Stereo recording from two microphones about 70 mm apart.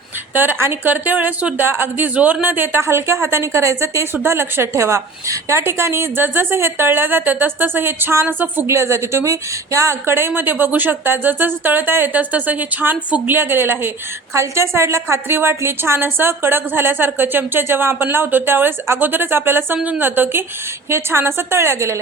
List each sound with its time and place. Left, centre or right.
0.3 s a woman's voice: right
4.1 s a woman's voice: right